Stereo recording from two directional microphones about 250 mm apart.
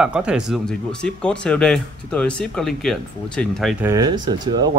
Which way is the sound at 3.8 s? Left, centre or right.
Centre.